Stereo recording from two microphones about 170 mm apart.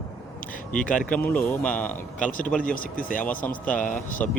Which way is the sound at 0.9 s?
10° left (ahead or behind).